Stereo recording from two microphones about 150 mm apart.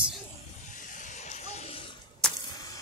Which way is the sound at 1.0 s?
55° left (ahead or behind).